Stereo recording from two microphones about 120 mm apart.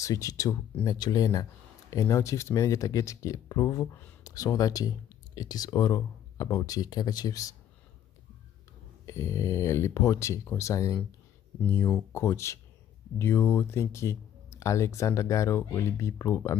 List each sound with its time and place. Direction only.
0.0 s speech: 25° left (ahead or behind)
9.0 s speech: 25° left (ahead or behind)
12.1 s speech: 20° left (ahead or behind)